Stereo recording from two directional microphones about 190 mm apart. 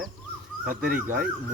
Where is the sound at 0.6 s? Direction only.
5° right (ahead or behind).